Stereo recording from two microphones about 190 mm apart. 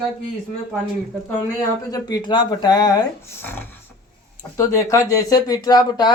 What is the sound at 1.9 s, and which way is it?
Speech, 20° left (ahead or behind).